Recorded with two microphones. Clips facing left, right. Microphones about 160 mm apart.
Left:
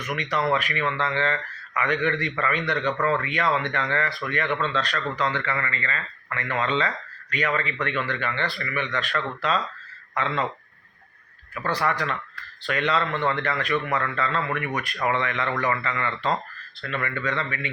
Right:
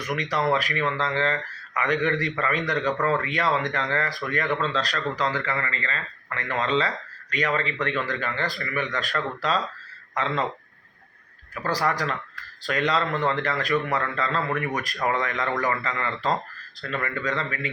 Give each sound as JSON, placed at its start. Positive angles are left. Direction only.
{"t": 0.0, "sound": "speech", "side_deg": -35}
{"t": 4.4, "sound": "speech", "side_deg": -5}
{"t": 4.7, "sound": "speech", "side_deg": -35}
{"t": 11.6, "sound": "speech", "side_deg": -35}